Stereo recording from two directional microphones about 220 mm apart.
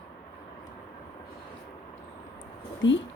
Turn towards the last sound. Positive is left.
turn(degrees=55)  # may be behind; listen again after turning